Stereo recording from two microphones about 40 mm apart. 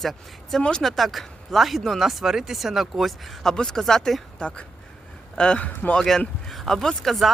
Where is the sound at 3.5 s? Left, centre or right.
Centre.